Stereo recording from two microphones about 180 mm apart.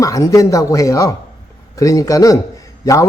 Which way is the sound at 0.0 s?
20° left (ahead or behind).